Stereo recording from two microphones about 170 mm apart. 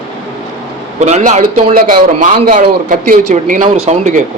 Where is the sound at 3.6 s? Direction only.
35° right (ahead or behind).